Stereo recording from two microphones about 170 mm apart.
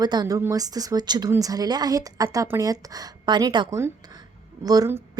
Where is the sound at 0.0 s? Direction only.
25° right (ahead or behind).